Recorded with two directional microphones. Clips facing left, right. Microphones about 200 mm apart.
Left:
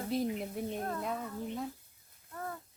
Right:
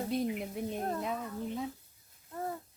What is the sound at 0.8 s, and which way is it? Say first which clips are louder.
Speech: right 2 dB; 25° right (ahead or behind).